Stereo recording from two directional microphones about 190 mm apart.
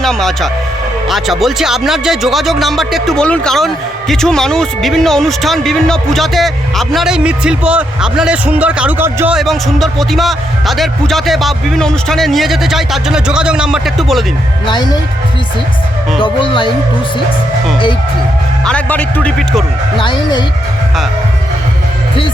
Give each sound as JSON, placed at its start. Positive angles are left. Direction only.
{"t": 0.0, "sound": "speech", "side_deg": 0}
{"t": 16.2, "sound": "speech", "side_deg": 25}
{"t": 18.6, "sound": "speech", "side_deg": 5}
{"t": 20.0, "sound": "speech", "side_deg": 25}